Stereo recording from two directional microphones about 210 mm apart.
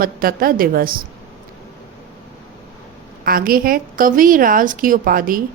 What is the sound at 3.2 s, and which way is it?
A woman's voice, 45° right (ahead or behind).